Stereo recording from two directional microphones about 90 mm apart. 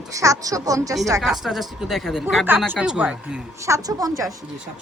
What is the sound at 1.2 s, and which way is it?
Speech, 5° right (ahead or behind).